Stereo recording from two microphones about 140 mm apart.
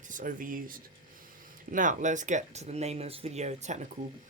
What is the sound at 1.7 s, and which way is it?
Speech, 70° right (ahead or behind).